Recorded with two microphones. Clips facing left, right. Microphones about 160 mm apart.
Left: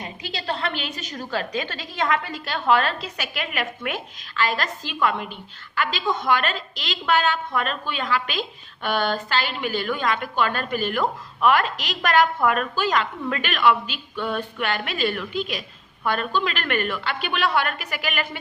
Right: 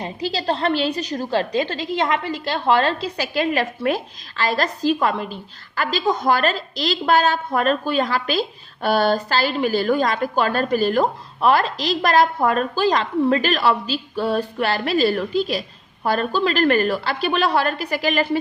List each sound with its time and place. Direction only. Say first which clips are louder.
0.0 s a woman's voice: right 8 dB; 35° right (ahead or behind)